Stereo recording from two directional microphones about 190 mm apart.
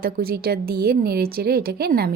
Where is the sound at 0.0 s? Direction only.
55° right (ahead or behind).